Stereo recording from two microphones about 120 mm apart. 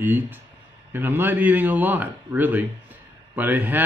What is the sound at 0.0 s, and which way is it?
Speech, 15° right (ahead or behind).